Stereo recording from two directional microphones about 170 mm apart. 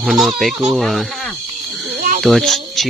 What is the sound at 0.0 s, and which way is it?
Speech, centre (ahead or behind).